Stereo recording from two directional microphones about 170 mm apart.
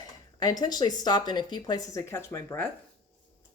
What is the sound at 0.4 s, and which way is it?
Speech, 25° left (ahead or behind).